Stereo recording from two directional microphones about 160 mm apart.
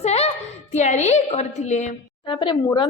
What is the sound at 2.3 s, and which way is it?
Speech, 30° left (ahead or behind).